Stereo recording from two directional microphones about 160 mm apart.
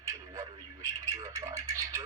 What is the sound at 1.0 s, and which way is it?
Speech, 20° right (ahead or behind).